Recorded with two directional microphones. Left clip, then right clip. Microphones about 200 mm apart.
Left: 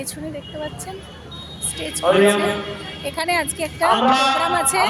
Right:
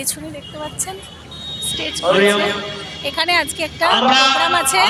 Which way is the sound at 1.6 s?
Centre (ahead or behind).